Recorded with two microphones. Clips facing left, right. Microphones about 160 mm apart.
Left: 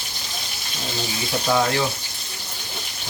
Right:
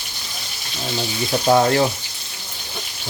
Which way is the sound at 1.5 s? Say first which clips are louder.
Right 5 dB; 45° right (ahead or behind).